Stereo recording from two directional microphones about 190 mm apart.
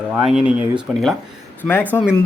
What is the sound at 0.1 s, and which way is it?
Speech, 5° right (ahead or behind).